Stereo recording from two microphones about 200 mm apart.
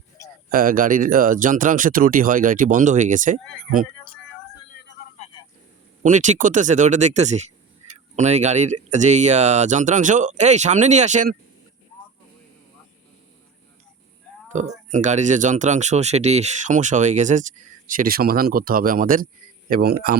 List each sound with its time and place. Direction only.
0.2 s a sound: 15° left (ahead or behind)
0.5 s speech: 45° right (ahead or behind)
6.0 s speech: 40° right (ahead or behind)
14.5 s speech: 35° right (ahead or behind)